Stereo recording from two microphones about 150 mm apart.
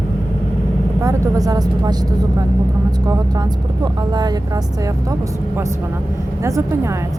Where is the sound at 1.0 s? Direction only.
20° right (ahead or behind).